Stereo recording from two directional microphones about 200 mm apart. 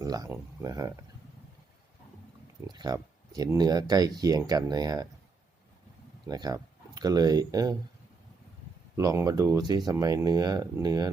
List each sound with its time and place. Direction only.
0.0 s speech: 15° right (ahead or behind)
2.6 s speech: 20° right (ahead or behind)
6.2 s speech: 20° right (ahead or behind)
9.0 s speech: 15° right (ahead or behind)